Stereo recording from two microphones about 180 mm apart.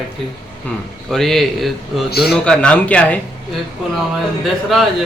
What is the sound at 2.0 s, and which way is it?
Speech, 60° left (ahead or behind).